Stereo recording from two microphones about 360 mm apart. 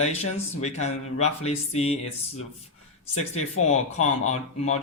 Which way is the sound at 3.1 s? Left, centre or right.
Centre.